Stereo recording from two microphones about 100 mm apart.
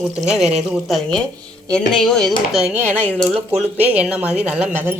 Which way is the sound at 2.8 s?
15° left (ahead or behind).